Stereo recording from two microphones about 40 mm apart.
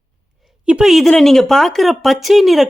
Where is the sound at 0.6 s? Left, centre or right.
Right.